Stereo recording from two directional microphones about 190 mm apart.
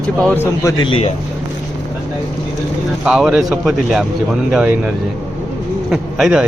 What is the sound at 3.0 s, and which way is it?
Speech, 5° right (ahead or behind).